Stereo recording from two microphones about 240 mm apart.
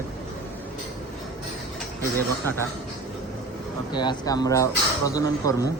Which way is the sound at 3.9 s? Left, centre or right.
Centre.